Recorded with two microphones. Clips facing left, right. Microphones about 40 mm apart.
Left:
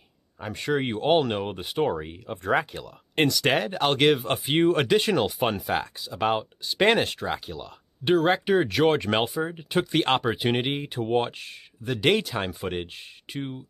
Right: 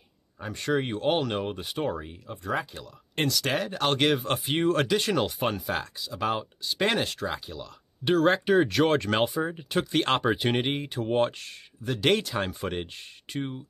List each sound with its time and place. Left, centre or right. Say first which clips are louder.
0.6 s speech: left 1 dB; centre
2.3 s speech: left 6 dB; left
2.6 s speech: left 4 dB; left
3.8 s speech: left 3 dB; centre
5.9 s speech: left 3 dB; centre
8.1 s speech: left 1 dB; centre